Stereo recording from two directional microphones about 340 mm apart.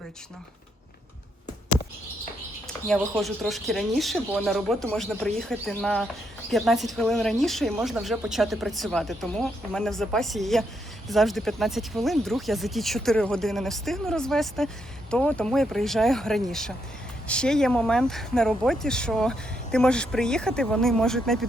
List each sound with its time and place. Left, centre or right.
2.6 s a woman's voice: centre